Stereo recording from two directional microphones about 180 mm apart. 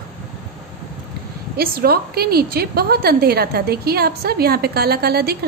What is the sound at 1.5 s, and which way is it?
A woman's voice, 55° right (ahead or behind).